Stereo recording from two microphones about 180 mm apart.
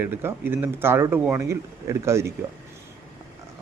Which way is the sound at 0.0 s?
10° right (ahead or behind).